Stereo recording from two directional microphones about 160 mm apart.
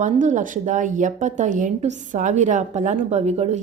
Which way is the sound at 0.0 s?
50° right (ahead or behind).